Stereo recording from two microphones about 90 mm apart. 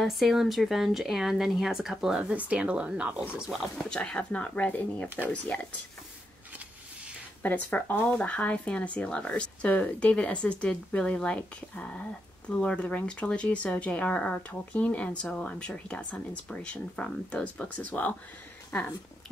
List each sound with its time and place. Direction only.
0.0 s speech: centre (ahead or behind)
3.7 s speech: 10° left (ahead or behind)
7.4 s speech: 20° left (ahead or behind)